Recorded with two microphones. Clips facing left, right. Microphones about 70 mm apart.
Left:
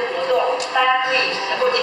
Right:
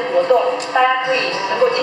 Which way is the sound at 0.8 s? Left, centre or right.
Centre.